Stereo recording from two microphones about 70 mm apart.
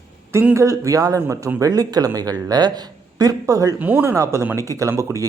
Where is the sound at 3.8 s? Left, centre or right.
Right.